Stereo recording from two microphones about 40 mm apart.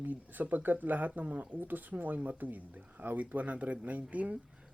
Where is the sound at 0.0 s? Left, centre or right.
Right.